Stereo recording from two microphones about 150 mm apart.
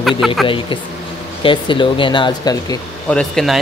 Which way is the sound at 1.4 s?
35° left (ahead or behind).